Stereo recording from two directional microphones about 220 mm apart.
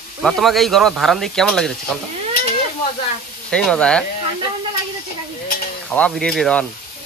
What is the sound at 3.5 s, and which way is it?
Speech, 5° left (ahead or behind).